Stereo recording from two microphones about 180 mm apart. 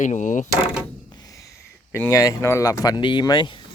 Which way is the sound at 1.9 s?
15° left (ahead or behind).